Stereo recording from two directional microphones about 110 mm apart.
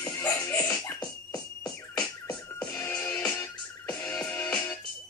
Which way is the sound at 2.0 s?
30° left (ahead or behind).